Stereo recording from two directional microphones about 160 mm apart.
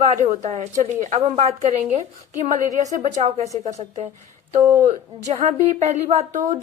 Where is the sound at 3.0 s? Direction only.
45° right (ahead or behind).